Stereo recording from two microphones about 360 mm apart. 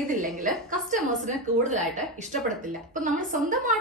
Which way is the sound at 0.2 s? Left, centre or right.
Right.